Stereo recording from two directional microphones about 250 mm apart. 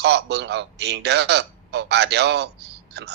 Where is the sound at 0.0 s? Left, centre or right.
Right.